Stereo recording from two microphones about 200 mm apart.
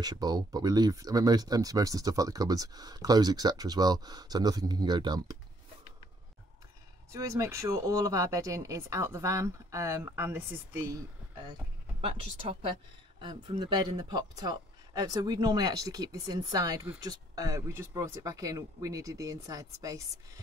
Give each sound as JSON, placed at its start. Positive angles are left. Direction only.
{"t": 0.0, "sound": "speech", "side_deg": -20}
{"t": 7.1, "sound": "speech", "side_deg": -15}